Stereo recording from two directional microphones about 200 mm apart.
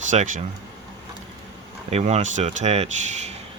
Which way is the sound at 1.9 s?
35° right (ahead or behind).